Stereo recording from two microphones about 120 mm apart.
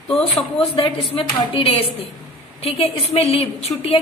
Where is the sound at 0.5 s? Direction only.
50° left (ahead or behind).